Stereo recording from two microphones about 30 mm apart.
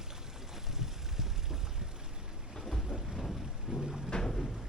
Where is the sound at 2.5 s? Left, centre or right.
Centre.